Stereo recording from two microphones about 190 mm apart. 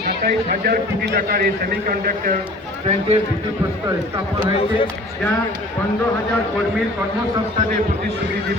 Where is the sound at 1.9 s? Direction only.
45° right (ahead or behind).